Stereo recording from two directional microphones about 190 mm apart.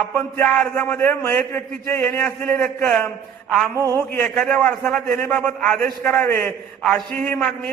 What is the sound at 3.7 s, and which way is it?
Speech, 20° right (ahead or behind).